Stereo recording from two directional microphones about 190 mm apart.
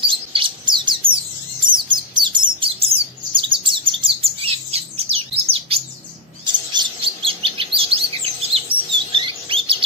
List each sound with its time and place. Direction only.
0.0 s bird: 25° right (ahead or behind)
6.4 s chirp: 25° right (ahead or behind)
9.1 s a sound: 25° right (ahead or behind)